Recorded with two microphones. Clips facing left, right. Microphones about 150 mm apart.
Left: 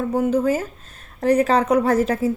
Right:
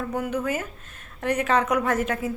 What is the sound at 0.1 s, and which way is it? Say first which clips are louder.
A woman's voice: left 9 dB; 30° left (ahead or behind).